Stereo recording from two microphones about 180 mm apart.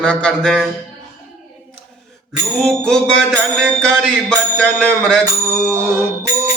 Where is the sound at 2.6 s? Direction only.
5° left (ahead or behind).